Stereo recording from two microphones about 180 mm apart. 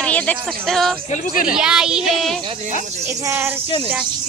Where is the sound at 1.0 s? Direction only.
45° left (ahead or behind).